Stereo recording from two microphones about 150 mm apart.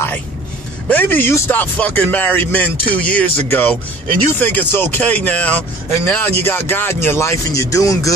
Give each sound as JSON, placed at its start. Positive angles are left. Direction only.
{"t": 0.8, "sound": "speech", "side_deg": 15}